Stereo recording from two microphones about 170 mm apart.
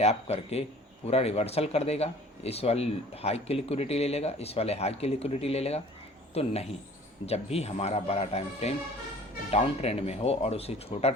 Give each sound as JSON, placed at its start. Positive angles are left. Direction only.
{"t": 0.0, "sound": "speech", "side_deg": 40}